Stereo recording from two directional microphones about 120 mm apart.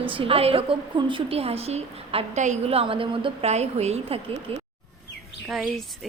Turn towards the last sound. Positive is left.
turn(degrees=0)  # may be behind; listen again after turning